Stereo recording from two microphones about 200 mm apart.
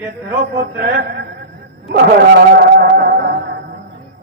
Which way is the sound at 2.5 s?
50° right (ahead or behind).